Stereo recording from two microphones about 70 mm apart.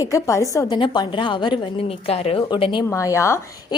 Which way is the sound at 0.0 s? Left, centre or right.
Left.